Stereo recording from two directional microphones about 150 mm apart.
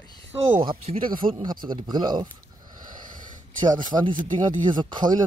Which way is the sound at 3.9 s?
20° right (ahead or behind).